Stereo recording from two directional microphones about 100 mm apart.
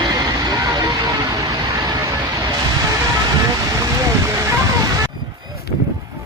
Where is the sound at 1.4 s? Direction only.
30° right (ahead or behind).